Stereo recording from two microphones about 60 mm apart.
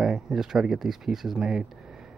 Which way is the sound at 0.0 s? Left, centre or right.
Centre.